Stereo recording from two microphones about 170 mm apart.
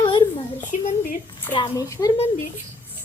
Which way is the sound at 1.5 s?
30° left (ahead or behind).